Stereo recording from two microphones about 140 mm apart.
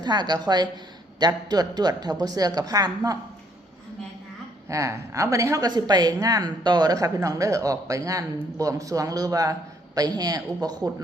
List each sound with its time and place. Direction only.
0.0 s a woman's voice: 30° right (ahead or behind)
4.7 s a woman's voice: 20° right (ahead or behind)